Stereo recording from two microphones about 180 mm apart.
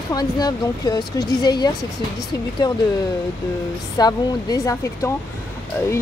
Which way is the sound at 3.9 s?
20° left (ahead or behind).